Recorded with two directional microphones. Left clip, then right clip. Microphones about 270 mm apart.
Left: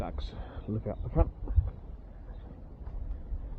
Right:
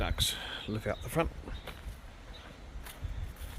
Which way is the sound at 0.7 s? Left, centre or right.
Right.